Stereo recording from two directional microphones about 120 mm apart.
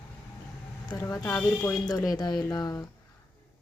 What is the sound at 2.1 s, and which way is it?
Speech, 35° left (ahead or behind).